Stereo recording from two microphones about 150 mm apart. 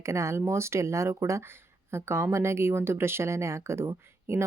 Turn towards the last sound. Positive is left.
turn(degrees=-15)  # may be behind; listen again after turning